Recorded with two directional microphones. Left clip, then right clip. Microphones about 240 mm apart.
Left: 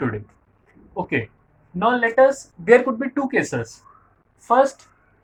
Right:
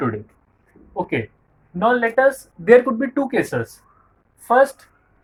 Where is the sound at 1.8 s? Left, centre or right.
Centre.